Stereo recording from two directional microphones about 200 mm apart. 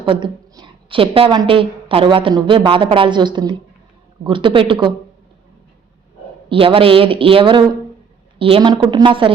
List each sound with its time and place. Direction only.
0.0 s a woman's voice: 25° right (ahead or behind)
6.5 s a woman's voice: 25° right (ahead or behind)